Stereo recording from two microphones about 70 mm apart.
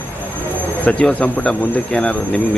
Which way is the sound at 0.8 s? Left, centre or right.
Left.